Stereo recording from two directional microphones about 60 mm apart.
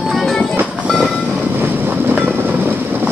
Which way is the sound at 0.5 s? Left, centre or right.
Right.